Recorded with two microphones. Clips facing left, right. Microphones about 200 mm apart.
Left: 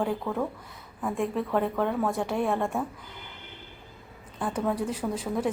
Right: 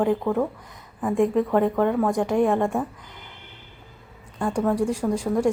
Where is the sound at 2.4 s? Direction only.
15° right (ahead or behind).